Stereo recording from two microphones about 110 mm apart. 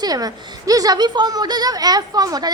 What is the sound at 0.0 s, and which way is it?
A woman's voice, 35° right (ahead or behind).